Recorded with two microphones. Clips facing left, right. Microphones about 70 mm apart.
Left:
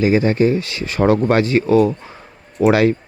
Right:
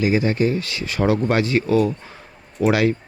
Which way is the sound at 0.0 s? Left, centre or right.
Left.